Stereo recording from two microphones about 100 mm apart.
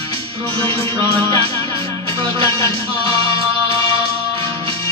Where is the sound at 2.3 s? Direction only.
60° right (ahead or behind).